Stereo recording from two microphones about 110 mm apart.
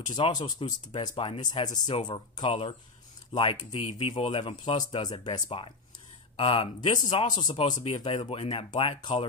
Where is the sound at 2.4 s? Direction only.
60° left (ahead or behind).